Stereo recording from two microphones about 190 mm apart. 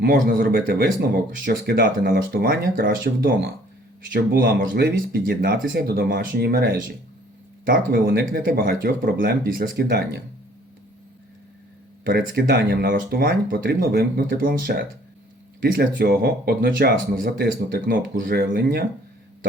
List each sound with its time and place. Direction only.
0.0 s speech: 50° right (ahead or behind)
12.0 s speech: 50° right (ahead or behind)
18.4 s speech: 60° right (ahead or behind)